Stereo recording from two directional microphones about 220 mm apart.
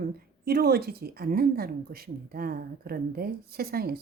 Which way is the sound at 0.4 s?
45° right (ahead or behind).